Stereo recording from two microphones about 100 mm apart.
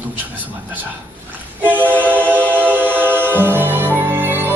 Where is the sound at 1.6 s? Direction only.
15° right (ahead or behind).